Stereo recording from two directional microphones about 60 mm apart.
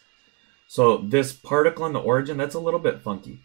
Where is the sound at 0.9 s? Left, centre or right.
Left.